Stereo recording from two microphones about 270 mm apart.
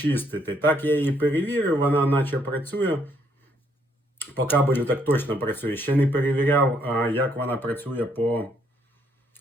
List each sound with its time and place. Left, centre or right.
0.0 s speech: centre
4.2 s speech: centre